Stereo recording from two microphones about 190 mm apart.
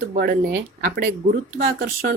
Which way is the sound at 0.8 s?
50° right (ahead or behind).